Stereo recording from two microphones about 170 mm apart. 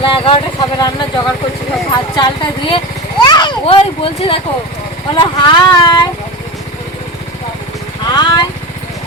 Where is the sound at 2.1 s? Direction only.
30° left (ahead or behind).